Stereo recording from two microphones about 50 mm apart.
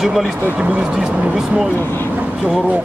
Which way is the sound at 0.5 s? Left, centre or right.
Right.